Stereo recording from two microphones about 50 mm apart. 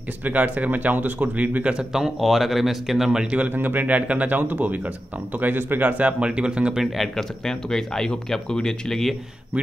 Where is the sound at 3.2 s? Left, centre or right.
Right.